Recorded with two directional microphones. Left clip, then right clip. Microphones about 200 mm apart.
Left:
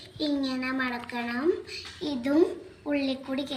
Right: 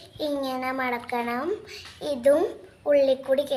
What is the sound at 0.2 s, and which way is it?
A child's voice, 70° right (ahead or behind).